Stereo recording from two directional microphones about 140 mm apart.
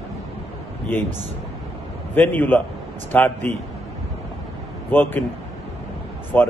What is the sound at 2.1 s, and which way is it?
A man's voice, 15° left (ahead or behind).